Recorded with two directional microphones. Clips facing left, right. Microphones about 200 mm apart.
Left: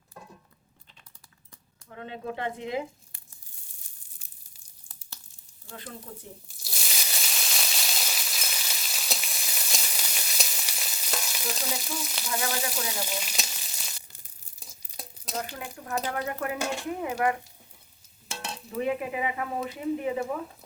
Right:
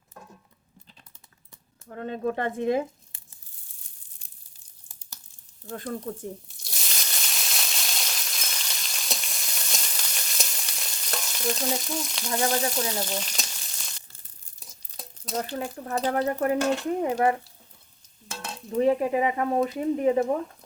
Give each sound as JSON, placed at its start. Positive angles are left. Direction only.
{"t": 1.9, "sound": "speech", "side_deg": -45}
{"t": 5.7, "sound": "speech", "side_deg": -45}
{"t": 6.6, "sound": "a sound", "side_deg": 5}
{"t": 12.3, "sound": "speech", "side_deg": -35}
{"t": 12.9, "sound": "frying", "side_deg": 10}
{"t": 14.6, "sound": "a sound", "side_deg": 10}
{"t": 15.9, "sound": "speech", "side_deg": -35}
{"t": 18.8, "sound": "speech", "side_deg": -35}